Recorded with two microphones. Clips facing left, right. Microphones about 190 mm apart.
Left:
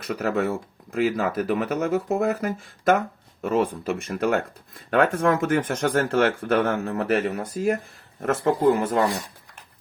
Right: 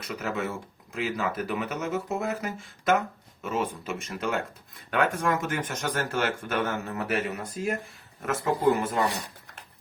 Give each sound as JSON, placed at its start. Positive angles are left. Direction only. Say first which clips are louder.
{"t": 0.0, "sound": "speech", "louder": "left 7 dB", "side_deg": 55}